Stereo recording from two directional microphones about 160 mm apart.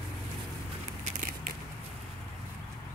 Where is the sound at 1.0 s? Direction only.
60° right (ahead or behind).